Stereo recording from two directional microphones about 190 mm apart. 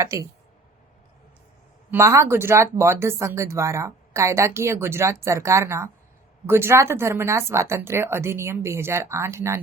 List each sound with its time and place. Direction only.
0.0 s speech: 15° right (ahead or behind)
1.9 s speech: 15° right (ahead or behind)